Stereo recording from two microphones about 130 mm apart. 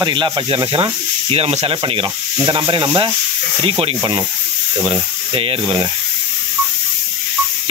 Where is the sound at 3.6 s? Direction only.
45° right (ahead or behind).